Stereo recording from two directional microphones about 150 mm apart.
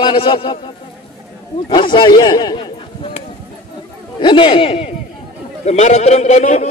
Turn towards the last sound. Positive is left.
turn(degrees=50)  # may be behind; listen again after turning